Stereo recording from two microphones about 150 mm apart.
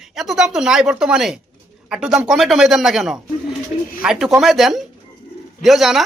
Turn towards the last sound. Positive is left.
turn(degrees=0)  # may be behind; listen again after turning